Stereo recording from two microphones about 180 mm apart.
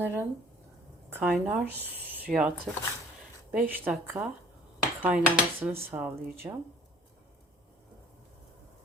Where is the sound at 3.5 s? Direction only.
10° right (ahead or behind).